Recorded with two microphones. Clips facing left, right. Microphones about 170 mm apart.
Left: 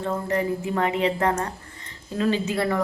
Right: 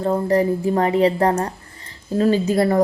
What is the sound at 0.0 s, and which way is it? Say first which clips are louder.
A woman's voice: right 7 dB; 35° right (ahead or behind).